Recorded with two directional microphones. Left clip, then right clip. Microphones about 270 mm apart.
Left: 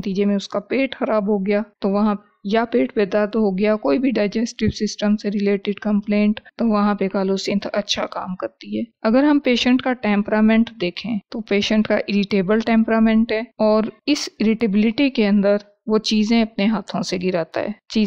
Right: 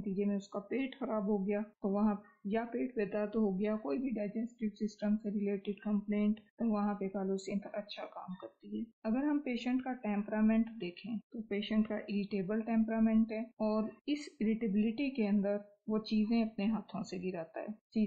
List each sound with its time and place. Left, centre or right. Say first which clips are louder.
0.2 s a woman's voice: left 17 dB; left